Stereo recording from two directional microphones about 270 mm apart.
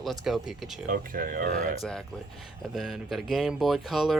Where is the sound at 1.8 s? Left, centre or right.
Centre.